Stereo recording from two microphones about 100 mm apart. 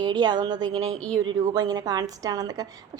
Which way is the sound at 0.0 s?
45° right (ahead or behind).